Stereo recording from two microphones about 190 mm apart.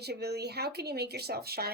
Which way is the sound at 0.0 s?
60° right (ahead or behind).